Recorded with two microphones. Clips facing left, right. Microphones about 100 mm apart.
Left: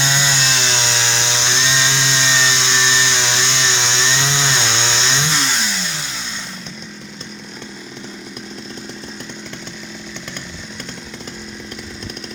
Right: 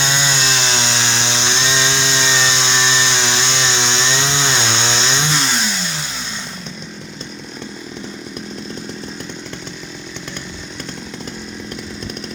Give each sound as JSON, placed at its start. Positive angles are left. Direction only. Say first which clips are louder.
{"t": 0.0, "sound": "chainsaw", "louder": "even", "side_deg": 0}
{"t": 2.4, "sound": "chainsaw", "louder": "right 1 dB", "side_deg": -30}
{"t": 3.1, "sound": "chainsaw", "louder": "right 1 dB", "side_deg": -5}